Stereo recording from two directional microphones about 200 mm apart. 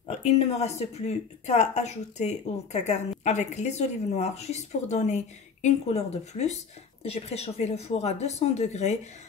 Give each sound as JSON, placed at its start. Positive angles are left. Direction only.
{"t": 0.1, "sound": "speech", "side_deg": 35}